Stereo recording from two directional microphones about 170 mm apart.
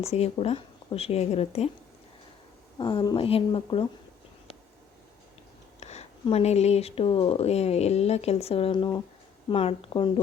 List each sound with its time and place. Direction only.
0.0 s speech: 35° left (ahead or behind)
2.7 s speech: 25° left (ahead or behind)
5.8 s speech: 40° left (ahead or behind)